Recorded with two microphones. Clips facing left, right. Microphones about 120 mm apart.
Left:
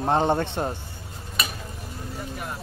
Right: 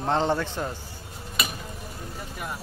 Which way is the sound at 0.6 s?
35° left (ahead or behind).